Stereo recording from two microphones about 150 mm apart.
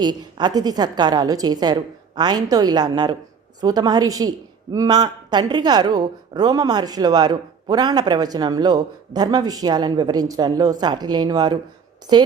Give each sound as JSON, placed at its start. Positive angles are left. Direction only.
{"t": 0.0, "sound": "a woman's voice", "side_deg": -30}